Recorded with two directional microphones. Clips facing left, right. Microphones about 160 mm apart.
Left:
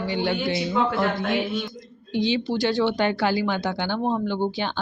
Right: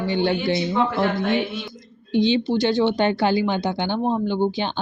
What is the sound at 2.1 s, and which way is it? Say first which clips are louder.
Speech: right 4 dB; 25° right (ahead or behind).